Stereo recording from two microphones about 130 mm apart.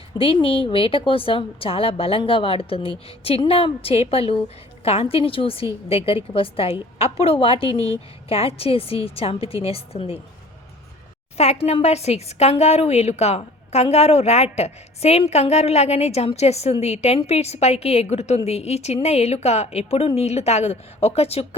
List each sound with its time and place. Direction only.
0.2 s a woman's voice: 45° left (ahead or behind)
11.3 s speech: 55° left (ahead or behind)